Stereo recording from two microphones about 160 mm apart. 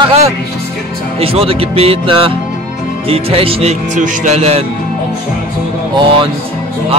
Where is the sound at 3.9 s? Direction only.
50° right (ahead or behind).